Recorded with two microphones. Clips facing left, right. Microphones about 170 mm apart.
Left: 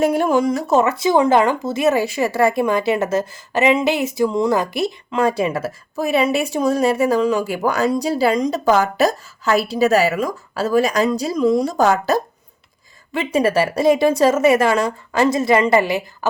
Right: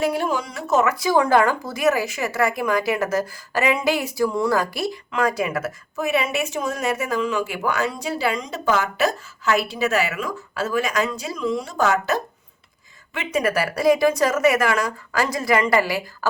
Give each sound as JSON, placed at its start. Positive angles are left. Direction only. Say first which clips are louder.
{"t": 0.0, "sound": "speech", "louder": "left 7 dB", "side_deg": 50}
{"t": 0.7, "sound": "speech", "louder": "left 1 dB", "side_deg": 30}